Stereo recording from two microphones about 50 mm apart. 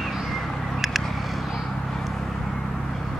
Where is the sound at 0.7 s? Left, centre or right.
Centre.